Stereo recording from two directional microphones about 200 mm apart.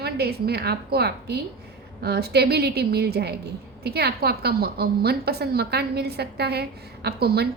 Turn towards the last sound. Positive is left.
turn(degrees=-50)  # may be behind; listen again after turning